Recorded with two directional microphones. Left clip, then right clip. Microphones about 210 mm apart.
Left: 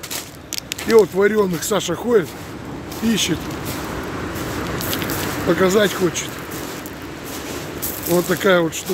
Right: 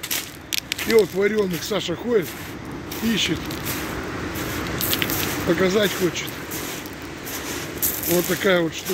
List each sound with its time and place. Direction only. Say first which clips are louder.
0.5 s a sound: left 1 dB; 20° left (ahead or behind)
0.9 s speech: left 5 dB; 10° left (ahead or behind)
5.5 s speech: left 4 dB; 10° left (ahead or behind)
8.1 s speech: left 4 dB; 10° left (ahead or behind)